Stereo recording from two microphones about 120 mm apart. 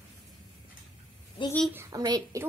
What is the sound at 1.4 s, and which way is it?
Speech, 45° left (ahead or behind).